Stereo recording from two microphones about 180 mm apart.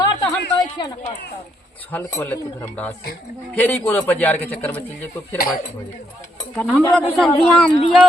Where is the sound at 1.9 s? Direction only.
10° left (ahead or behind).